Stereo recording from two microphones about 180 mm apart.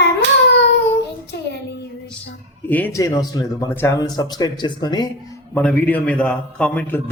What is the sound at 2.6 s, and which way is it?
Speech, 10° left (ahead or behind).